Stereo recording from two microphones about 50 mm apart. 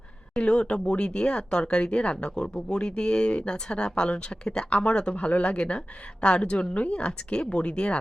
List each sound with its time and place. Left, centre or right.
0.3 s speech: centre